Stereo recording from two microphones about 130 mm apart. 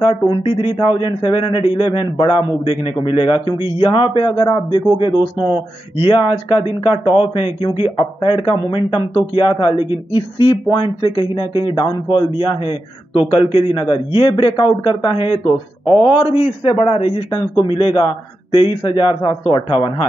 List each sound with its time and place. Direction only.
0.0 s a man's voice: 40° left (ahead or behind)
16.3 s a man's voice: 50° left (ahead or behind)